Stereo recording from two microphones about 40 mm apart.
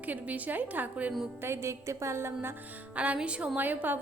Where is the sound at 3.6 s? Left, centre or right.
Right.